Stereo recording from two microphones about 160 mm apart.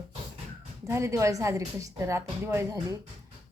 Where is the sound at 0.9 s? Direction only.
15° right (ahead or behind).